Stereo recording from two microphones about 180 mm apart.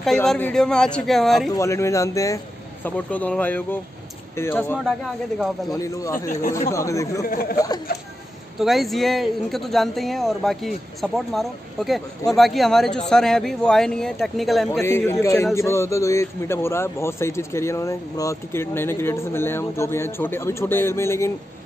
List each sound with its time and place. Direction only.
0.0 s a man's voice: centre (ahead or behind)
1.5 s a man's voice: 15° left (ahead or behind)
4.7 s a man's voice: centre (ahead or behind)
5.7 s a man's voice: 15° left (ahead or behind)
7.2 s speech: 55° left (ahead or behind)
7.5 s speech: 20° left (ahead or behind)
8.5 s a man's voice: centre (ahead or behind)
14.7 s a man's voice: 15° left (ahead or behind)